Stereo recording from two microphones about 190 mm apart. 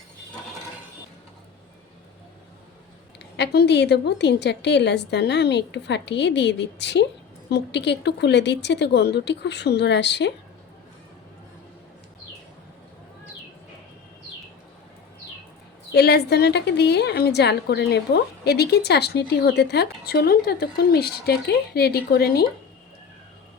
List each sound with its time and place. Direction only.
3.3 s a woman's voice: 60° left (ahead or behind)
15.9 s a woman's voice: 60° left (ahead or behind)